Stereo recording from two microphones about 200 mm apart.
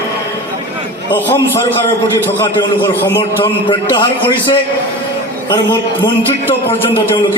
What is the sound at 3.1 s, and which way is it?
A man's voice, 20° left (ahead or behind).